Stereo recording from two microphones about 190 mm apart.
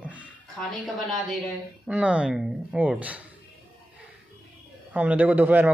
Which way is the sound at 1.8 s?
5° right (ahead or behind).